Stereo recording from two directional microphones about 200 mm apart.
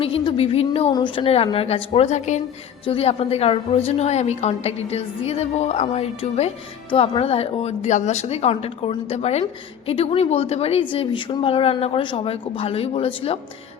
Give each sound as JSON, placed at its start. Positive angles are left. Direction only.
{"t": 0.0, "sound": "a woman's voice", "side_deg": 30}